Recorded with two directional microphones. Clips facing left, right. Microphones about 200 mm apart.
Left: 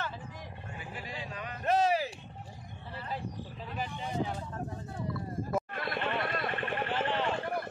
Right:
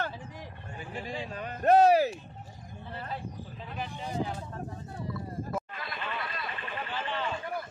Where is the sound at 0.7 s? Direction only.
45° right (ahead or behind).